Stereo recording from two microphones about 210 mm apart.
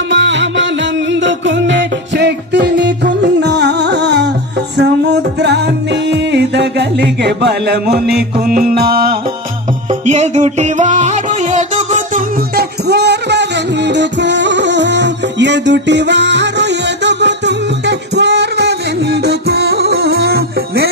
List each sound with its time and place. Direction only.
0.1 s music: 60° right (ahead or behind)
9.9 s music: 35° right (ahead or behind)